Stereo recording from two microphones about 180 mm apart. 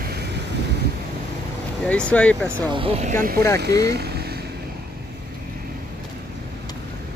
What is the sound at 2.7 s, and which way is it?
Speech, 30° right (ahead or behind).